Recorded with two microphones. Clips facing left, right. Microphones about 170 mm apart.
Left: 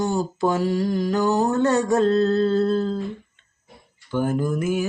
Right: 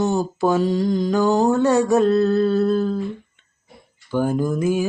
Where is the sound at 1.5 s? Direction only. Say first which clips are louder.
Right 3 dB; 10° right (ahead or behind).